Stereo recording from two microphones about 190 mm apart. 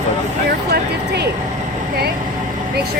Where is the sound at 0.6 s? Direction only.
60° right (ahead or behind).